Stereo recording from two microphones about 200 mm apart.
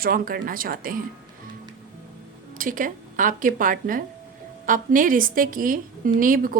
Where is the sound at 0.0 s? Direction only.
45° right (ahead or behind).